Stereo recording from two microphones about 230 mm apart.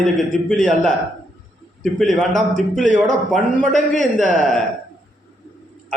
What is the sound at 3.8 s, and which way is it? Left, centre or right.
Speech, left.